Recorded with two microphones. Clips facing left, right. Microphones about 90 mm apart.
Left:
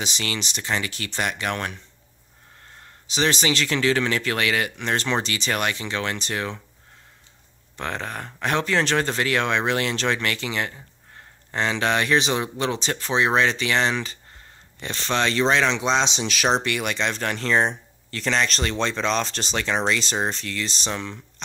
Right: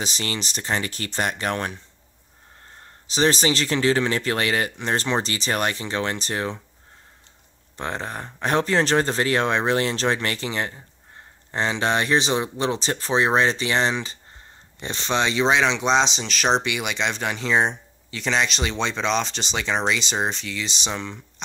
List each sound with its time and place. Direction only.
0.0 s speech: 35° right (ahead or behind)
2.8 s speech: 35° right (ahead or behind)
7.7 s speech: 30° right (ahead or behind)
15.2 s speech: 5° right (ahead or behind)